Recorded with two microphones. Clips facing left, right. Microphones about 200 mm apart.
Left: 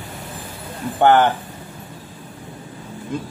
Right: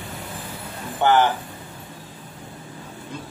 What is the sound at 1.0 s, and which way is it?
Speech, 55° left (ahead or behind).